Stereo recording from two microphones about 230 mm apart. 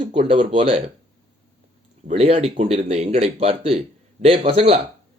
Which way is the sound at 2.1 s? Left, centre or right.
Right.